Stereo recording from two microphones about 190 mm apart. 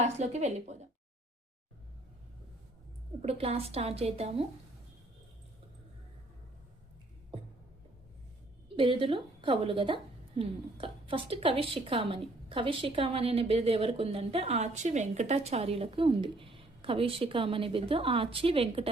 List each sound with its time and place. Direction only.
0.0 s a woman's voice: 35° right (ahead or behind)
3.2 s a woman's voice: 30° right (ahead or behind)
8.7 s a woman's voice: 25° right (ahead or behind)